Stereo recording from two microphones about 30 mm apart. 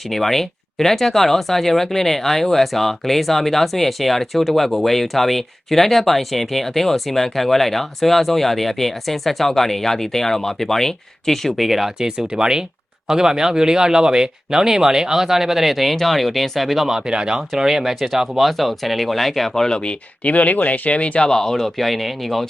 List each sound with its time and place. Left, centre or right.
0.1 s speech: centre
11.5 s speech: centre
11.9 s speech: right; by 16.8 s centre
17.1 s speech: right; by 19.6 s centre
19.6 s speech: left
19.9 s speech: left
21.2 s speech: left
21.5 s speech: centre